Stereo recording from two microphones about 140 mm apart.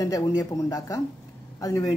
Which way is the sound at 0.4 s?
30° left (ahead or behind).